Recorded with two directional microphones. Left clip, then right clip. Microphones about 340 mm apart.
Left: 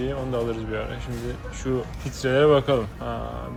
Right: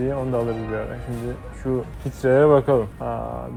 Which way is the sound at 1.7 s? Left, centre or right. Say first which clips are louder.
Right 2 dB; centre.